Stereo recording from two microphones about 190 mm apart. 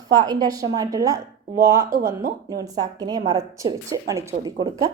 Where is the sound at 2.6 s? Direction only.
20° right (ahead or behind).